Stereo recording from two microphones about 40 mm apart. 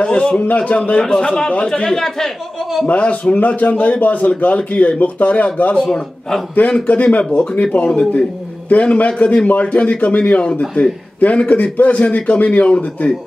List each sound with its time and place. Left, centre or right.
0.0 s speech: left
0.7 s speech: left
1.0 s a man's voice: centre
2.9 s speech: left
5.8 s a man's voice: centre
6.9 s speech: left
10.4 s speech: left
11.1 s speech: left